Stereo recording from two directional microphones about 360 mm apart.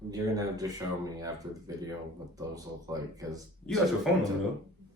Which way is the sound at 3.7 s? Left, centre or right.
Centre.